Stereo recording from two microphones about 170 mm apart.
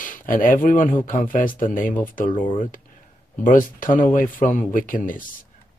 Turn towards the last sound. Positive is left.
turn(degrees=55)  # may be behind; listen again after turning